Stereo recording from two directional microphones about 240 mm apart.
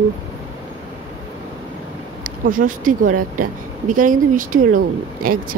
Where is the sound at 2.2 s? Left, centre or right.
Right.